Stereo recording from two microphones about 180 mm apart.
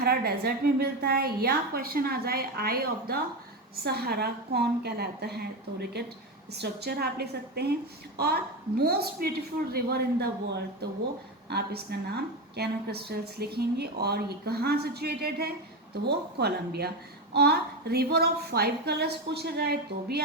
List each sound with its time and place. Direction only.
0.0 s a woman's voice: 60° right (ahead or behind)
6.5 s a woman's voice: 65° right (ahead or behind)
8.8 s a woman's voice: 60° right (ahead or behind)